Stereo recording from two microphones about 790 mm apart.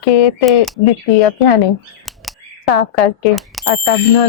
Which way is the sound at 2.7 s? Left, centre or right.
Left.